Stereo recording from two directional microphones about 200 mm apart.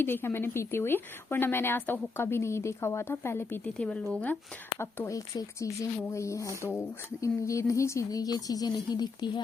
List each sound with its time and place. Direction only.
0.0 s a woman's voice: 10° left (ahead or behind)